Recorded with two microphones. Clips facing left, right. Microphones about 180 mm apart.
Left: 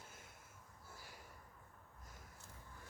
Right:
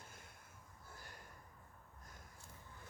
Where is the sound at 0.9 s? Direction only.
5° left (ahead or behind).